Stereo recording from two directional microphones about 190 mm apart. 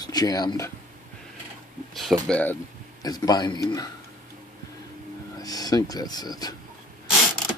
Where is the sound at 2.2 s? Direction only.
5° left (ahead or behind).